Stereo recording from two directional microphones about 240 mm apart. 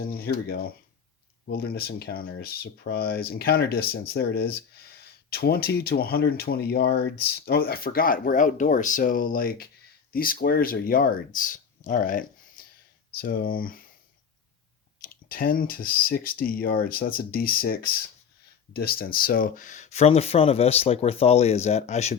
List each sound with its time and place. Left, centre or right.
0.0 s speech: left
15.0 s speech: left